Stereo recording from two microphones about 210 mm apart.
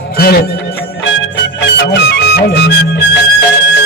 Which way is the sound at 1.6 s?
55° left (ahead or behind).